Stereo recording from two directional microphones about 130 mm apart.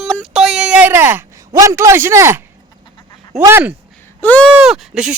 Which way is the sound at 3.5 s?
20° right (ahead or behind).